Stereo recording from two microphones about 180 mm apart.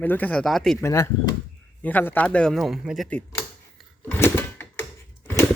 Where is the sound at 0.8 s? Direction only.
15° left (ahead or behind).